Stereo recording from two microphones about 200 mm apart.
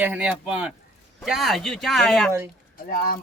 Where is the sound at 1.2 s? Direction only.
Centre (ahead or behind).